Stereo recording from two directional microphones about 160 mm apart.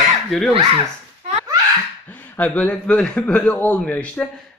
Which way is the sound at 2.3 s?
10° left (ahead or behind).